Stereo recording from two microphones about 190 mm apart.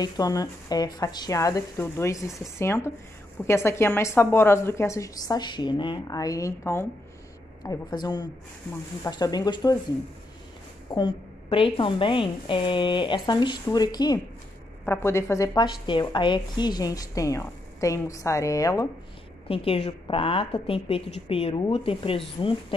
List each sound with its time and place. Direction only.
0.0 s a woman's voice: 20° left (ahead or behind)
10.9 s a woman's voice: 25° left (ahead or behind)
19.4 s a woman's voice: 30° left (ahead or behind)